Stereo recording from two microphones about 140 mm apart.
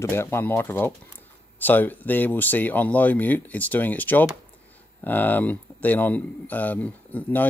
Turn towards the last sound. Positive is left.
turn(degrees=10)  # may be behind; listen again after turning